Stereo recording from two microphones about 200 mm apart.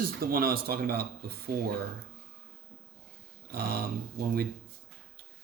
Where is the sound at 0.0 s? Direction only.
45° right (ahead or behind).